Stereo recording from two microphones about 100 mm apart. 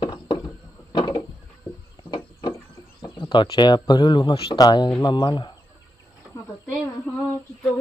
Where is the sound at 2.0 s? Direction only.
50° left (ahead or behind).